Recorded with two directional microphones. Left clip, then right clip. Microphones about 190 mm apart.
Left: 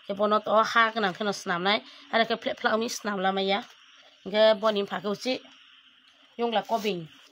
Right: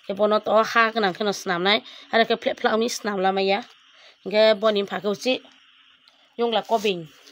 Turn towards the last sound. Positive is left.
turn(degrees=-50)  # may be behind; listen again after turning